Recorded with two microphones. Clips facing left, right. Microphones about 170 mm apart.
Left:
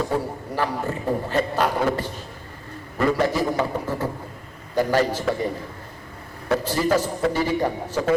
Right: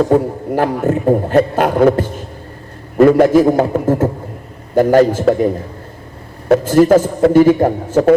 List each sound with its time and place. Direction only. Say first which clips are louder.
0.0 s a man's voice: right 12 dB; 50° right (ahead or behind)
6.5 s a man's voice: right 12 dB; 50° right (ahead or behind)